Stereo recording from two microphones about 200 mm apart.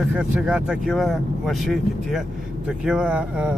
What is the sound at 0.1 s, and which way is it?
Speech, 5° right (ahead or behind).